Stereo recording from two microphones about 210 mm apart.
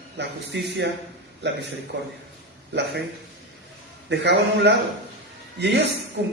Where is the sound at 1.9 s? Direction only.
55° right (ahead or behind).